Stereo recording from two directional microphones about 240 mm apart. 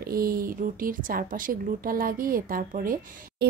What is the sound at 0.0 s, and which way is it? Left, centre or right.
A woman's voice, right.